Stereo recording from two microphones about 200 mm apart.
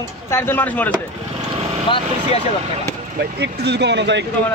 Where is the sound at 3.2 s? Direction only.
55° right (ahead or behind).